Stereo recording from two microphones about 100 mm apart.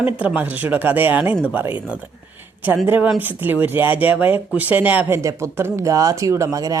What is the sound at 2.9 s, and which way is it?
Speech, 15° right (ahead or behind).